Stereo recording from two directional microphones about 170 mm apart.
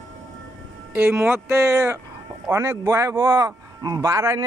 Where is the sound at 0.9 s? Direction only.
10° right (ahead or behind).